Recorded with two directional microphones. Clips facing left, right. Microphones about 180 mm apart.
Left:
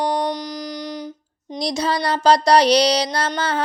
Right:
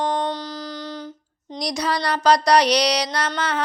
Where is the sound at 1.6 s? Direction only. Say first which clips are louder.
Left 2 dB; 25° left (ahead or behind).